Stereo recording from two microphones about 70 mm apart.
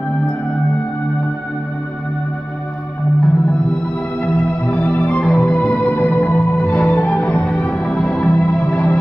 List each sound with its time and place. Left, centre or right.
4.4 s music: centre
7.4 s music: centre
8.1 s music: centre